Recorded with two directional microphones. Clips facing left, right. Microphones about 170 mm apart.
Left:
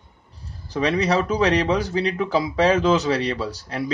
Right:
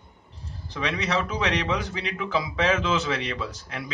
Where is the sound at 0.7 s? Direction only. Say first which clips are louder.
Left 7 dB; 35° left (ahead or behind).